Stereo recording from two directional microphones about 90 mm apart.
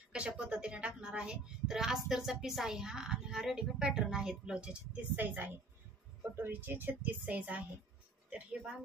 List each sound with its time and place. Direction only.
0.1 s a woman's voice: 10° right (ahead or behind)